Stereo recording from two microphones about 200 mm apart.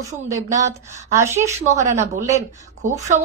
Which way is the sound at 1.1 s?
15° right (ahead or behind).